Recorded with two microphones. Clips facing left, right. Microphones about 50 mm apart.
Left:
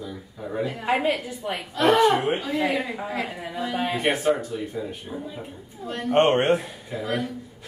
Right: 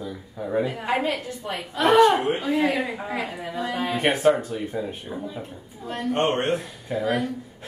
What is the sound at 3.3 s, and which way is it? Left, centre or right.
Speech, centre.